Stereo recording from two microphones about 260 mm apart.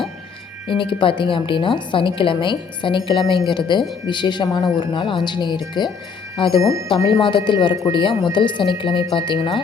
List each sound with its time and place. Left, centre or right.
0.7 s a woman's voice: centre
6.6 s speech: centre
7.1 s a woman's voice: centre